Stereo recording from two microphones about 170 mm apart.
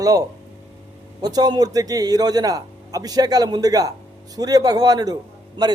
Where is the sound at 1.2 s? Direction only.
25° right (ahead or behind).